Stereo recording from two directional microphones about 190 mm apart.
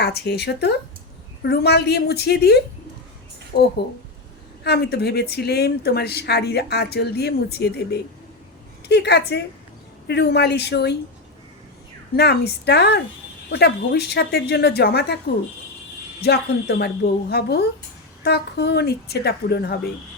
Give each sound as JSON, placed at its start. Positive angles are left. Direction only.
{"t": 0.0, "sound": "speech", "side_deg": 60}
{"t": 4.6, "sound": "speech", "side_deg": 60}
{"t": 12.1, "sound": "speech", "side_deg": 60}
{"t": 16.2, "sound": "speech", "side_deg": 60}